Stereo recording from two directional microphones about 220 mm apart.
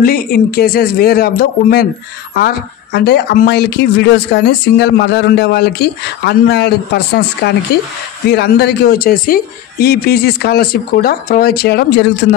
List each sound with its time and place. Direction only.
0.0 s speech: 40° left (ahead or behind)